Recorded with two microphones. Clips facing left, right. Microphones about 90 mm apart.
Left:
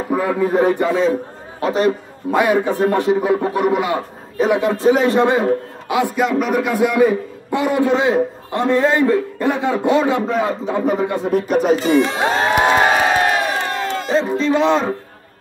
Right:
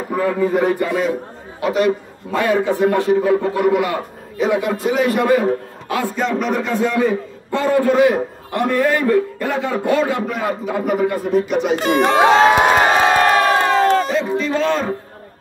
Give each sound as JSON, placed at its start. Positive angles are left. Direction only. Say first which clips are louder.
{"t": 0.1, "sound": "a sound", "louder": "even", "side_deg": 15}
{"t": 0.6, "sound": "a man's voice", "louder": "left 2 dB", "side_deg": 25}
{"t": 2.3, "sound": "a man's voice", "louder": "left 1 dB", "side_deg": 15}
{"t": 11.4, "sound": "speech", "louder": "left 3 dB", "side_deg": 40}
{"t": 11.7, "sound": "speech", "louder": "right 3 dB", "side_deg": -50}
{"t": 13.2, "sound": "crowd", "louder": "right 4 dB", "side_deg": -60}
{"t": 13.7, "sound": "a sound", "louder": "right 8 dB", "side_deg": -50}
{"t": 14.1, "sound": "a sound", "louder": "left 2 dB", "side_deg": 30}
{"t": 14.5, "sound": "a man's voice", "louder": "left 5 dB", "side_deg": 20}